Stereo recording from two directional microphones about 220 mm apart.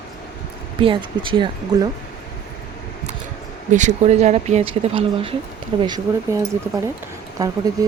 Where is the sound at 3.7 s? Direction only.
30° right (ahead or behind).